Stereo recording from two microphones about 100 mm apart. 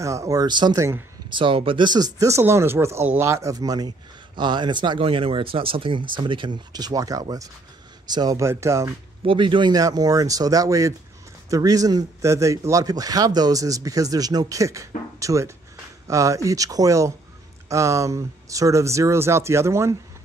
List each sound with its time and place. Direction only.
0.0 s a man's voice: 30° right (ahead or behind); by 0.7 s 45° right (ahead or behind)
0.7 s speech: 30° right (ahead or behind)
1.3 s a man's voice: 60° right (ahead or behind); by 3.9 s 40° right (ahead or behind)
4.4 s speech: 50° right (ahead or behind)
8.4 s speech: 30° right (ahead or behind)
9.2 s a man's voice: 60° right (ahead or behind); by 20.0 s 30° right (ahead or behind)